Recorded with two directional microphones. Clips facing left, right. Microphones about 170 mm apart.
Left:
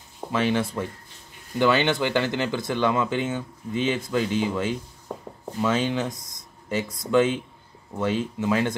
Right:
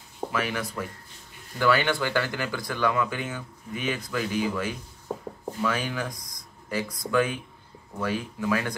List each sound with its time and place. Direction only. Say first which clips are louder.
0.3 s speech: left 7 dB; 25° left (ahead or behind)